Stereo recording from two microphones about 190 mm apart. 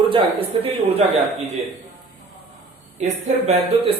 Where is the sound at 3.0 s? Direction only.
35° right (ahead or behind).